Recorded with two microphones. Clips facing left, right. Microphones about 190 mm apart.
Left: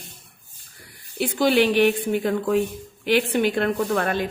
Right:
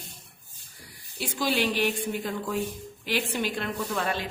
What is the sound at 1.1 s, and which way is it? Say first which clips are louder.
Speech: left 9 dB; 60° left (ahead or behind).